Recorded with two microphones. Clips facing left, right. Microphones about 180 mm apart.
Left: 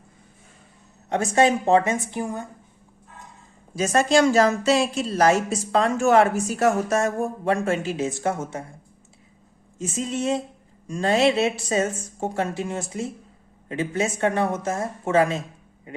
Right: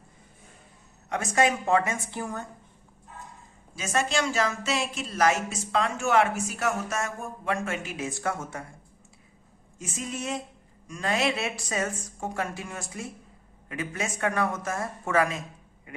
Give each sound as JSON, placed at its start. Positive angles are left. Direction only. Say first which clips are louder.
{"t": 1.1, "sound": "a woman's voice", "louder": "left 5 dB", "side_deg": 30}
{"t": 3.8, "sound": "a woman's voice", "louder": "left 9 dB", "side_deg": 40}
{"t": 9.7, "sound": "a woman's voice", "louder": "left 8 dB", "side_deg": 25}